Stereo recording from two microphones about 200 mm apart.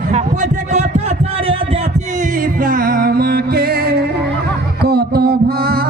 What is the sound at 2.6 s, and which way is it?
Music, 45° right (ahead or behind).